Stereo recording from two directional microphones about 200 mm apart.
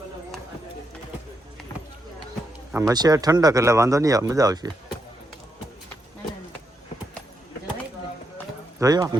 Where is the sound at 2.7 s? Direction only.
15° right (ahead or behind).